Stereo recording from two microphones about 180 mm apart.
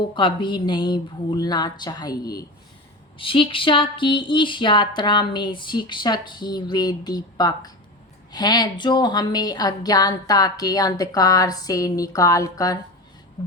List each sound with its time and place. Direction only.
0.1 s a woman's voice: 25° left (ahead or behind)